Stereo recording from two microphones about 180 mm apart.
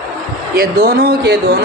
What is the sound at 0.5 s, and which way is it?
Speech, 55° right (ahead or behind).